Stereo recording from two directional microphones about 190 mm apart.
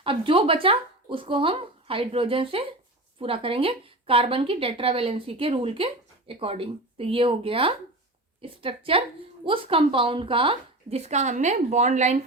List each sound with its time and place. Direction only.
0.0 s a woman's voice: 30° right (ahead or behind)